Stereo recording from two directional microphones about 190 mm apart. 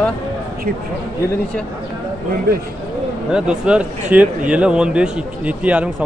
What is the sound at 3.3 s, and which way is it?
A man's voice, 5° right (ahead or behind).